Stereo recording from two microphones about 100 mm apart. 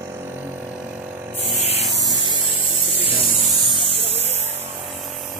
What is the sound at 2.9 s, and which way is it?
Electric toothbrush, 70° left (ahead or behind).